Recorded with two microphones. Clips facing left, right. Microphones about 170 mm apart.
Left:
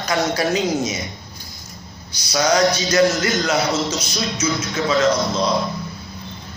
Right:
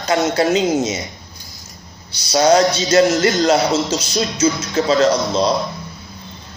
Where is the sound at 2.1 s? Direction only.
30° right (ahead or behind).